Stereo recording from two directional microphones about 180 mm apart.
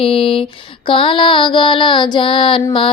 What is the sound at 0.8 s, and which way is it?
Female singing, 30° left (ahead or behind).